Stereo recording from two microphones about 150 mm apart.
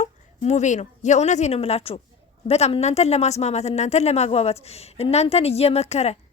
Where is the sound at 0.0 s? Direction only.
50° left (ahead or behind).